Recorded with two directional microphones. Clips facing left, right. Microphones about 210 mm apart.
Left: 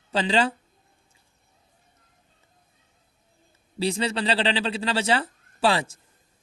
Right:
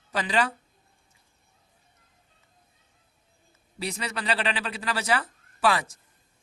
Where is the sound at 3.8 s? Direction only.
30° left (ahead or behind).